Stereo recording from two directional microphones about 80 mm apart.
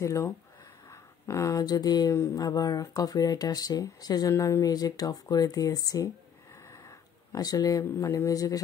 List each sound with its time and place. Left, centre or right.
0.0 s speech: left
4.7 s speech: left
6.7 s a sound: left
8.1 s speech: left